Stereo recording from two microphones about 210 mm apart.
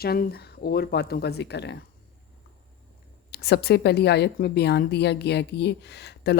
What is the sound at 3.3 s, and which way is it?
Speech, 50° left (ahead or behind).